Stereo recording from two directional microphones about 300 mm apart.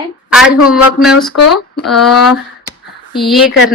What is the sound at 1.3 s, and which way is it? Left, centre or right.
Speech, left.